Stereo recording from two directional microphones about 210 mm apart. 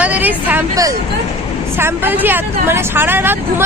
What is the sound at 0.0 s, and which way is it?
A woman's voice, 5° right (ahead or behind).